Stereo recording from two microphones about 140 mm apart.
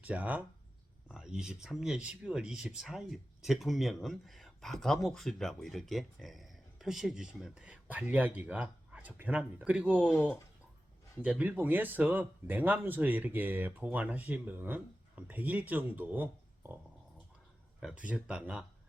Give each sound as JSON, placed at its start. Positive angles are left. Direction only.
{"t": 0.0, "sound": "speech", "side_deg": -10}
{"t": 11.2, "sound": "speech", "side_deg": -10}